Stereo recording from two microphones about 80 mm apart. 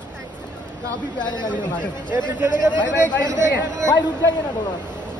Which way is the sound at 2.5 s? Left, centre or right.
Left.